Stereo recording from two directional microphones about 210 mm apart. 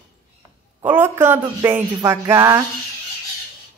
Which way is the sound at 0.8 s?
10° right (ahead or behind).